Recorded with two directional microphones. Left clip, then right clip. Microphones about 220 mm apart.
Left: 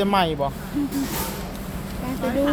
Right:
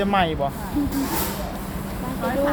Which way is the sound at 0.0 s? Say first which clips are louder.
Even; 20° left (ahead or behind).